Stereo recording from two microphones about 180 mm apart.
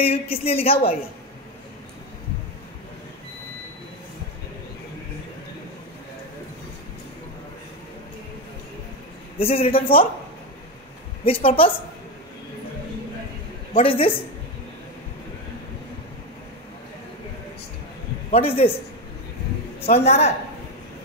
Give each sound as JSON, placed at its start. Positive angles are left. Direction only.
{"t": 0.0, "sound": "a woman's voice", "side_deg": 35}
{"t": 9.4, "sound": "a woman's voice", "side_deg": 30}
{"t": 11.2, "sound": "a woman's voice", "side_deg": 30}
{"t": 13.7, "sound": "a woman's voice", "side_deg": 30}
{"t": 18.3, "sound": "a woman's voice", "side_deg": 30}
{"t": 19.9, "sound": "a woman's voice", "side_deg": 35}